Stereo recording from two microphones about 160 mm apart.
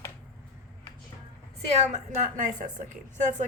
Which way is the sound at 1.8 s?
45° right (ahead or behind).